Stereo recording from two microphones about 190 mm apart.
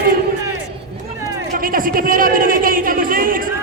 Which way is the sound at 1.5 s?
50° right (ahead or behind).